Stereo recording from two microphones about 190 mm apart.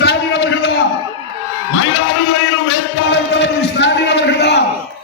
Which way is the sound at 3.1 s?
65° left (ahead or behind).